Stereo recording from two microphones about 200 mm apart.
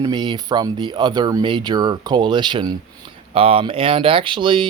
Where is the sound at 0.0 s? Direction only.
25° right (ahead or behind).